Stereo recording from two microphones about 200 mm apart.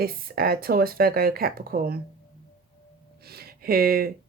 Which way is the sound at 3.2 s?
50° right (ahead or behind).